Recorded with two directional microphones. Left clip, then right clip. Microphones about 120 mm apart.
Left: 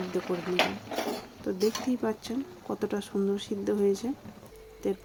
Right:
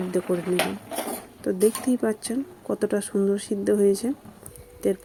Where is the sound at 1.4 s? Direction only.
30° right (ahead or behind).